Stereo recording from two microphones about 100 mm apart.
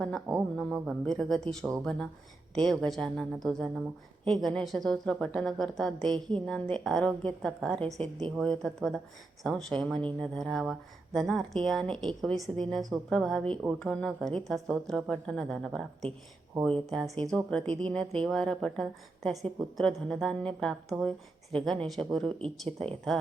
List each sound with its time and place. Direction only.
0.3 s a woman's voice: 5° left (ahead or behind)